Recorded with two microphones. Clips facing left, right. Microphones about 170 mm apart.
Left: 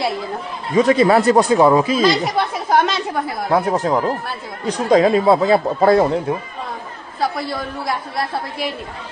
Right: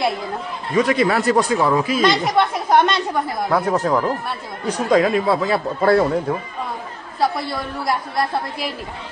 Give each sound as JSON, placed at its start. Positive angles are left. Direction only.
{"t": 0.7, "sound": "speech", "side_deg": 25}
{"t": 2.0, "sound": "speech", "side_deg": 0}
{"t": 3.4, "sound": "speech", "side_deg": 25}
{"t": 7.2, "sound": "a woman's voice", "side_deg": 0}